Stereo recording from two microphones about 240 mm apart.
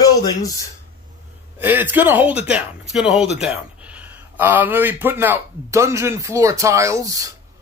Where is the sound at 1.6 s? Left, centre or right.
Centre.